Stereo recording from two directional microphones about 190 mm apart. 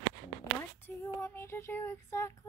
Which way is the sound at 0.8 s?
10° left (ahead or behind).